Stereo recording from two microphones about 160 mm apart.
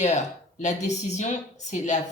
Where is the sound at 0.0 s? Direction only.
50° left (ahead or behind).